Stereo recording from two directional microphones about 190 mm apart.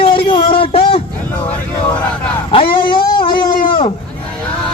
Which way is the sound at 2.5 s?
25° left (ahead or behind).